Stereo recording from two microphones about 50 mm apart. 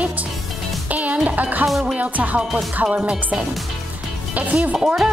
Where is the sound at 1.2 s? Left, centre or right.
Right.